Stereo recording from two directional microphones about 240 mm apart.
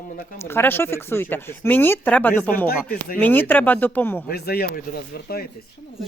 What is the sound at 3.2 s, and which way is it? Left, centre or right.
Speech, centre.